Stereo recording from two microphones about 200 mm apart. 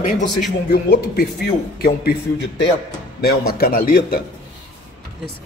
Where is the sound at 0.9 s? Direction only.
50° left (ahead or behind).